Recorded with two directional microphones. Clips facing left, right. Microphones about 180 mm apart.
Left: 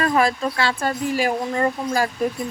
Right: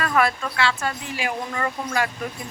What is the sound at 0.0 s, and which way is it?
Speech, 30° left (ahead or behind).